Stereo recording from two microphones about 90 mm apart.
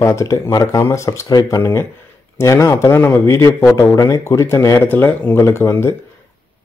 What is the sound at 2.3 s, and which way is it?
Speech, 35° left (ahead or behind).